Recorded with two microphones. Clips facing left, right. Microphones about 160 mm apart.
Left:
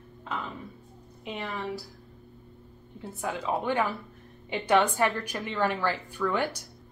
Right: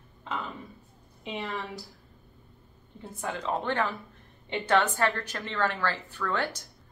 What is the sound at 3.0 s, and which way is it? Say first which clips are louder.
A woman's voice: left 2 dB; 5° left (ahead or behind).